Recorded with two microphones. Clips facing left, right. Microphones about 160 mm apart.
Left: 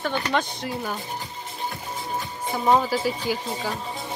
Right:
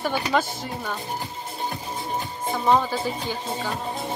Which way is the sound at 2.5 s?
10° left (ahead or behind).